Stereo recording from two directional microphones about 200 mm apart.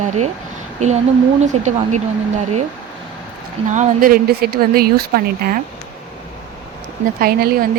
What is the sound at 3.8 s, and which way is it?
A woman's voice, 45° right (ahead or behind).